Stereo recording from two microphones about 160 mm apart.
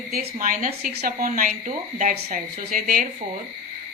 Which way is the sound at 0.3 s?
55° right (ahead or behind).